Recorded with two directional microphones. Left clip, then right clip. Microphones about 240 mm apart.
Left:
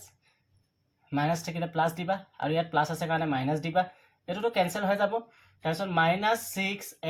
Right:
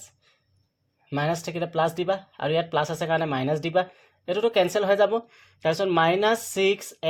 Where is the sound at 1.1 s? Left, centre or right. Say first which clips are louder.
Right 3 dB; right.